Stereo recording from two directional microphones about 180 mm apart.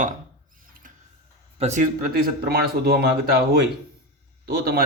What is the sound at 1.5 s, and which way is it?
Speech, 40° right (ahead or behind).